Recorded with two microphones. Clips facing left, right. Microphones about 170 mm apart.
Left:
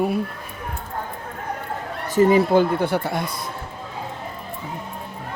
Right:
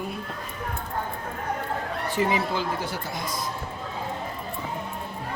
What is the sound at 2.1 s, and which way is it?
Speech, 45° left (ahead or behind).